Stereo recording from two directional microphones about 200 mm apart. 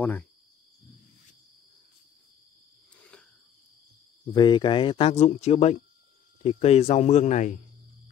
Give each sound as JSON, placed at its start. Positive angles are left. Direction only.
{"t": 0.0, "sound": "speech", "side_deg": 5}
{"t": 4.3, "sound": "speech", "side_deg": 25}